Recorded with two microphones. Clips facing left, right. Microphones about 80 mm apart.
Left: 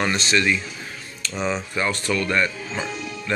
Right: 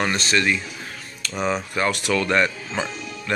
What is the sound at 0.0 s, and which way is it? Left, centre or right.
Speech, right.